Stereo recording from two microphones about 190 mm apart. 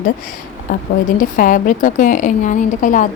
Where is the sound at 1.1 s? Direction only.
45° left (ahead or behind).